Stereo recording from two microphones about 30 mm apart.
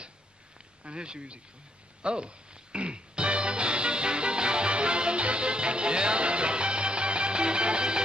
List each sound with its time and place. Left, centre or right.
0.8 s speech: right
2.0 s music: right